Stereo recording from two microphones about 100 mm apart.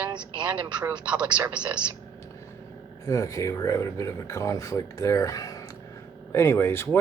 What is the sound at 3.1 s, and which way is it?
Speech, 35° left (ahead or behind).